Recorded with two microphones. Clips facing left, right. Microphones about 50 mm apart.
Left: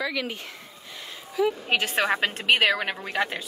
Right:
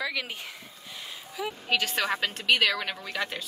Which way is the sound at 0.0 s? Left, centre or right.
Centre.